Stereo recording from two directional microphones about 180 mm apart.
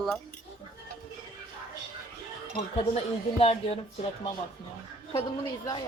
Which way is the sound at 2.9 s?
35° left (ahead or behind).